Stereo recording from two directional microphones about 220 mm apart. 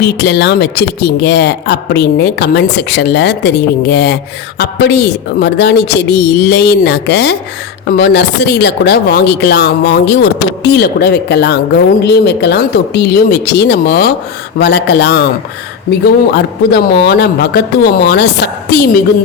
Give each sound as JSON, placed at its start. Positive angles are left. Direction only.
{"t": 0.0, "sound": "speech", "side_deg": 50}
{"t": 16.3, "sound": "speech", "side_deg": 45}